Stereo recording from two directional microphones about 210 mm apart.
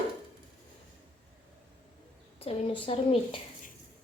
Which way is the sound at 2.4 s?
25° left (ahead or behind).